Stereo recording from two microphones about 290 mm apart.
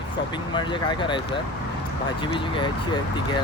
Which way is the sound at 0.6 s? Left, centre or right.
Centre.